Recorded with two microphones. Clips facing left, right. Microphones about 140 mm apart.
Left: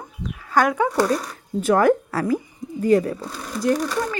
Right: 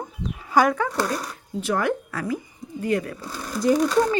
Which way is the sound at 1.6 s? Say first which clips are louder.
Left 7 dB; 45° left (ahead or behind).